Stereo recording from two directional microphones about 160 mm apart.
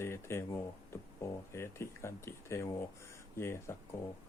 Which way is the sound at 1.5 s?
15° left (ahead or behind).